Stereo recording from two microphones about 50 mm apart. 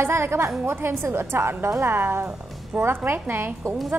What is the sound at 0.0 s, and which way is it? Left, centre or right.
A woman's voice, right.